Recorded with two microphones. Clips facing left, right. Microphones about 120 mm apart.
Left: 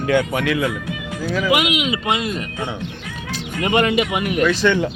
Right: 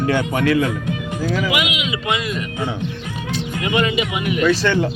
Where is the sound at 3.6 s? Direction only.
55° left (ahead or behind).